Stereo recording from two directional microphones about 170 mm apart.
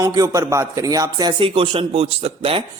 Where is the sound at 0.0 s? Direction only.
20° right (ahead or behind).